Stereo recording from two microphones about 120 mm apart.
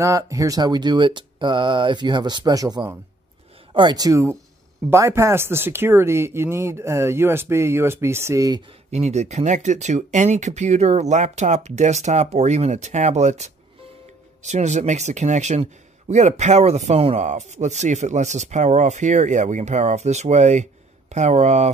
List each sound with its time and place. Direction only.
0.0 s speech: 25° right (ahead or behind)
8.9 s a man's voice: 65° right (ahead or behind)